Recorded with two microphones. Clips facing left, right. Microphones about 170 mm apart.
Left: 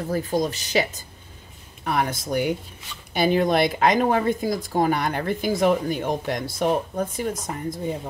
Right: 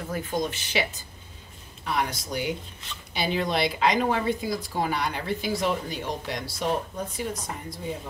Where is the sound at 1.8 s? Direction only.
50° left (ahead or behind).